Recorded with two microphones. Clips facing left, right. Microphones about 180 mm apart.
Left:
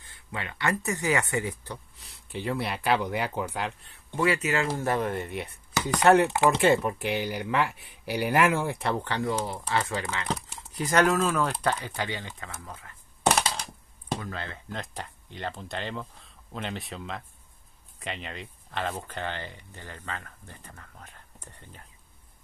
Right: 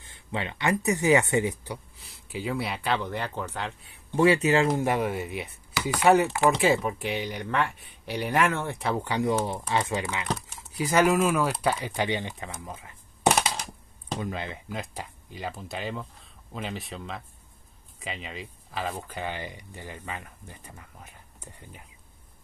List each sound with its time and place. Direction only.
0.0 s speech: 25° right (ahead or behind)
2.0 s speech: centre (ahead or behind)
4.2 s speech: 30° right (ahead or behind)
4.6 s speech: 15° right (ahead or behind); by 9.0 s centre (ahead or behind)
9.0 s speech: 15° right (ahead or behind)